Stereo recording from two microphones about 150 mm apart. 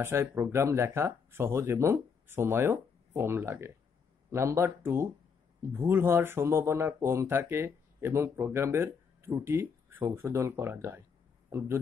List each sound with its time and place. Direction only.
0.0 s speech: 15° right (ahead or behind)